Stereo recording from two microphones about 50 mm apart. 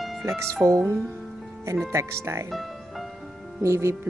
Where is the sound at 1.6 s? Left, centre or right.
Right.